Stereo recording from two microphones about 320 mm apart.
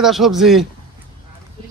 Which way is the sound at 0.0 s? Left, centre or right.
Centre.